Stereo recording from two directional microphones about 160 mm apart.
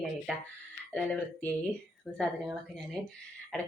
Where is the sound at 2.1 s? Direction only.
5° left (ahead or behind).